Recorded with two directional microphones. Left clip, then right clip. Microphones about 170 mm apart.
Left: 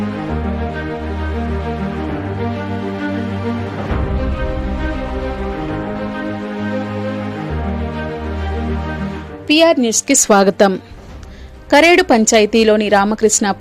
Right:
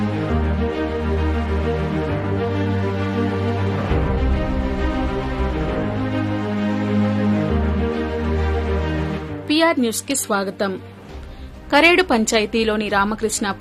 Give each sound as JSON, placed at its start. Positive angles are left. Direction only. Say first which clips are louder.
{"t": 9.5, "sound": "a woman's voice", "louder": "left 6 dB", "side_deg": 30}
{"t": 10.1, "sound": "a woman's voice", "louder": "left 10 dB", "side_deg": 50}
{"t": 11.7, "sound": "a woman's voice", "louder": "left 5 dB", "side_deg": 40}